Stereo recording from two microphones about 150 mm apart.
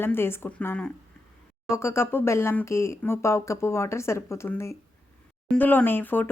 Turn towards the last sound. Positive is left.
turn(degrees=15)  # may be behind; listen again after turning